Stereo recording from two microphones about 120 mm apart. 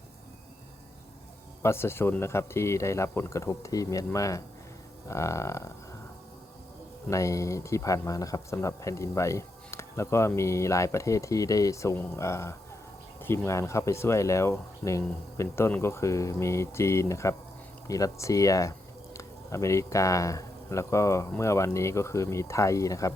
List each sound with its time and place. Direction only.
1.6 s a man's voice: 20° left (ahead or behind)
7.1 s a man's voice: 25° left (ahead or behind)